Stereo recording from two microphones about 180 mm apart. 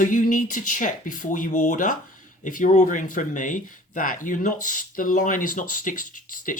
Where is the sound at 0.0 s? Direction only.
45° left (ahead or behind).